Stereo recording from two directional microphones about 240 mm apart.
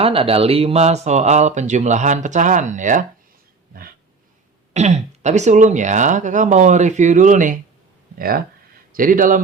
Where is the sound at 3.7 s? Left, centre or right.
Right.